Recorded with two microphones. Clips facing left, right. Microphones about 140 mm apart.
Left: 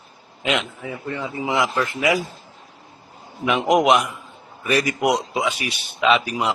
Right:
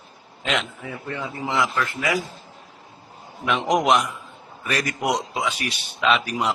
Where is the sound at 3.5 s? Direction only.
5° left (ahead or behind).